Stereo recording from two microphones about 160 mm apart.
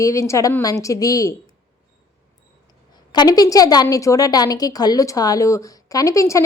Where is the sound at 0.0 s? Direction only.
20° left (ahead or behind).